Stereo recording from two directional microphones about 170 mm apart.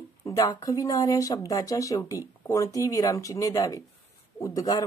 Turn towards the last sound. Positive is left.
turn(degrees=20)  # may be behind; listen again after turning